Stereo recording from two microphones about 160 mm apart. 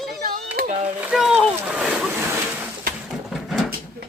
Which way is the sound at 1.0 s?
5° right (ahead or behind).